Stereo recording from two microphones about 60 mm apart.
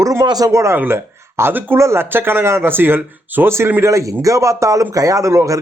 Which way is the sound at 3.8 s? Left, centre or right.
Right.